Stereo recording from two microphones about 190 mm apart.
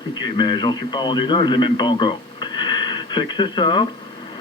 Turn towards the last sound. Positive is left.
turn(degrees=25)  # may be behind; listen again after turning